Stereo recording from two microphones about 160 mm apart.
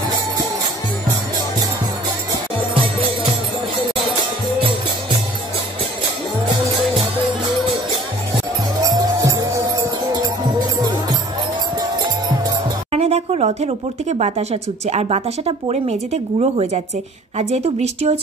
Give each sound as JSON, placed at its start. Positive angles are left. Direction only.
{"t": 8.8, "sound": "music", "side_deg": -20}
{"t": 12.9, "sound": "a woman's voice", "side_deg": -40}